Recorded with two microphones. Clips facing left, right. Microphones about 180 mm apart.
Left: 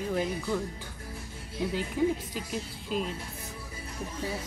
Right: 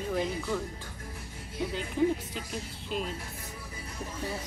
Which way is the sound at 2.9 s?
Centre (ahead or behind).